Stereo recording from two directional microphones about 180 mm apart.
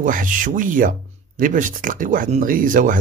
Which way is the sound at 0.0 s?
50° right (ahead or behind).